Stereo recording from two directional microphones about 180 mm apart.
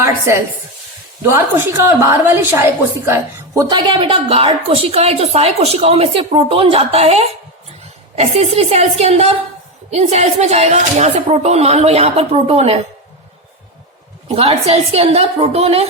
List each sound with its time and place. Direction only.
1.2 s a woman's voice: 15° right (ahead or behind); by 12.8 s 35° right (ahead or behind)
14.3 s a woman's voice: 30° right (ahead or behind)